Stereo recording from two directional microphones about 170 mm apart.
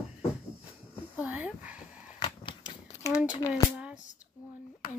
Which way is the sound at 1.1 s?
10° right (ahead or behind).